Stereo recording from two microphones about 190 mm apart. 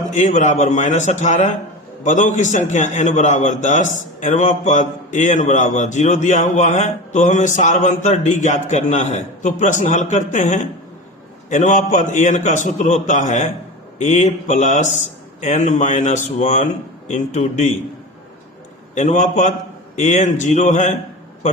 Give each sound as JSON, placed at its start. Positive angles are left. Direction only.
{"t": 0.1, "sound": "a man's voice", "side_deg": 40}
{"t": 18.9, "sound": "a man's voice", "side_deg": 40}